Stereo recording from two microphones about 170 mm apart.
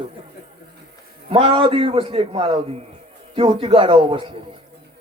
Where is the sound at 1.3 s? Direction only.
30° right (ahead or behind).